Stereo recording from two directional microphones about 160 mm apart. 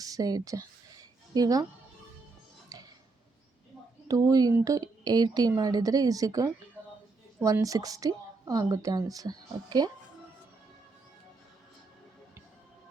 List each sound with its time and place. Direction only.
0.0 s a woman's voice: 20° right (ahead or behind)
2.7 s a sound: 25° right (ahead or behind)
4.1 s a woman's voice: 20° right (ahead or behind)